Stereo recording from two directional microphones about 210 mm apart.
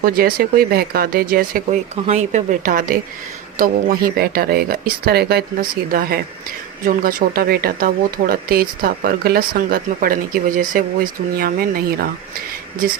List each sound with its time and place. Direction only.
0.0 s a woman's voice: 45° right (ahead or behind)